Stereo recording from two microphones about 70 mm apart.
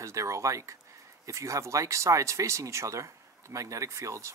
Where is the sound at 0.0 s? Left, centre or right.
Right.